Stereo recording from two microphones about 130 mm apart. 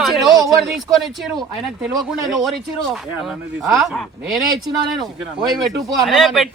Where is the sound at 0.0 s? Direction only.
Centre (ahead or behind).